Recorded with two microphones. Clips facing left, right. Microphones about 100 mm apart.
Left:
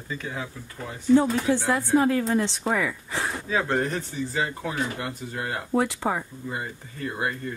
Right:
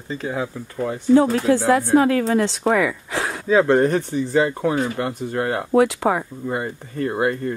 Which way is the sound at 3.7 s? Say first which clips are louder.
Right 9 dB; 55° right (ahead or behind).